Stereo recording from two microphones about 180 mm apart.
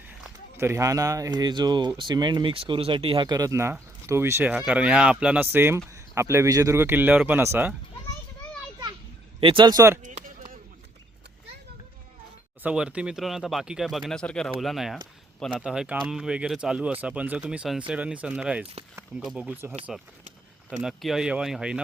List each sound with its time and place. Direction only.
0.5 s speech: 15° right (ahead or behind)
9.4 s speech: 30° right (ahead or behind)
10.0 s chop: 45° right (ahead or behind)
12.6 s speech: 5° right (ahead or behind)
20.8 s speech: centre (ahead or behind)